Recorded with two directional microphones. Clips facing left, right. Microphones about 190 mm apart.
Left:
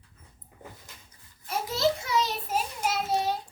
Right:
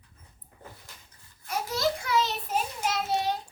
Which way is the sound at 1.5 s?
25° left (ahead or behind).